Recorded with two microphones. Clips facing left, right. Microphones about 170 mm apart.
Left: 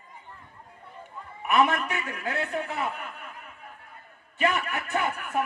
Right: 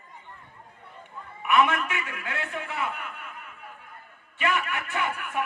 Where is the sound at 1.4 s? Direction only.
40° left (ahead or behind).